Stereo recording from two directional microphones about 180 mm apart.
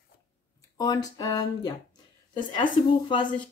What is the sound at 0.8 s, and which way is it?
Speech, 20° left (ahead or behind).